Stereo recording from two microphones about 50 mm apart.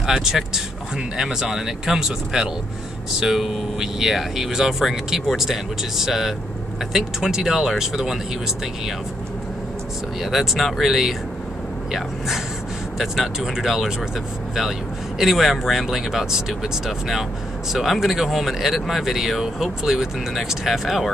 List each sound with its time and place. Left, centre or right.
0.0 s speech: centre
10.2 s speech: centre
13.0 s speech: centre
15.1 s speech: centre